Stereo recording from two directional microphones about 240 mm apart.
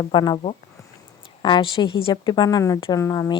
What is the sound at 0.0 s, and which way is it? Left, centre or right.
A woman's voice, centre.